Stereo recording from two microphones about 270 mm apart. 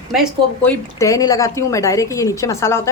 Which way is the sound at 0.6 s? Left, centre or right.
Centre.